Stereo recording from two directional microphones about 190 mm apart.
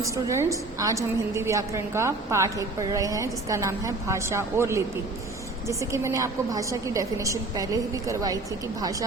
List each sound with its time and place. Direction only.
0.0 s a woman's voice: 15° right (ahead or behind)